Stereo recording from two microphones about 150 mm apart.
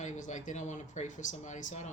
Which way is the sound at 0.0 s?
55° left (ahead or behind).